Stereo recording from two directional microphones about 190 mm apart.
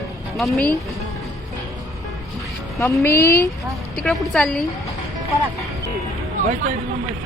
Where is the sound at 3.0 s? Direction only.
15° left (ahead or behind).